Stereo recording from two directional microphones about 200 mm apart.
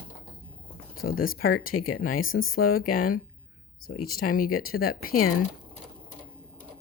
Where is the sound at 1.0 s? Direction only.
45° left (ahead or behind).